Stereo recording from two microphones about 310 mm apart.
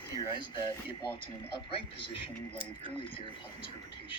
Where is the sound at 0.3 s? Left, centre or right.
Centre.